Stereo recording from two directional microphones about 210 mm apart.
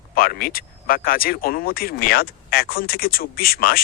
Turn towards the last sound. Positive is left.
turn(degrees=45)  # may be behind; listen again after turning